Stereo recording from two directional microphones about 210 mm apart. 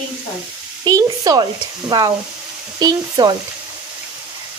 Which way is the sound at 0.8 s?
20° right (ahead or behind).